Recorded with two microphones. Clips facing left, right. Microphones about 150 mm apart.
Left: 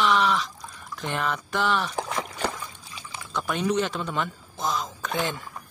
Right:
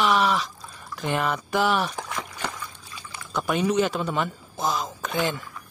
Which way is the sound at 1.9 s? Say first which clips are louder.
Left 4 dB; 30° left (ahead or behind).